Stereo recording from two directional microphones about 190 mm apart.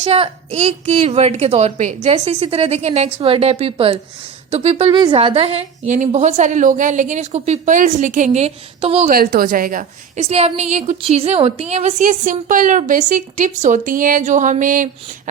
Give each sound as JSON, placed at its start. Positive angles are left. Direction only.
{"t": 0.0, "sound": "a woman's voice", "side_deg": -35}
{"t": 9.0, "sound": "a woman's voice", "side_deg": -50}
{"t": 10.2, "sound": "a woman's voice", "side_deg": -35}